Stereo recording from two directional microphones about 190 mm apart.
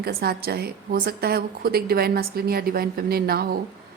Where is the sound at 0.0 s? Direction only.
55° right (ahead or behind).